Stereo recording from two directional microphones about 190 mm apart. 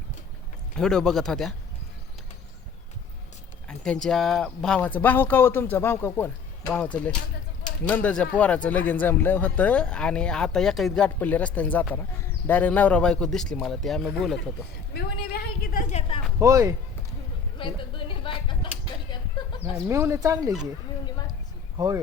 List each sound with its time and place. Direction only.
0.8 s speech: 5° left (ahead or behind)
3.7 s speech: 5° left (ahead or behind)
14.9 s a sound: 55° left (ahead or behind); by 16.2 s 30° left (ahead or behind)
16.4 s speech: 15° right (ahead or behind)
17.6 s a sound: 25° left (ahead or behind)
19.1 s chicken: 25° left (ahead or behind)
19.7 s speech: 15° right (ahead or behind)
21.8 s speech: 20° right (ahead or behind)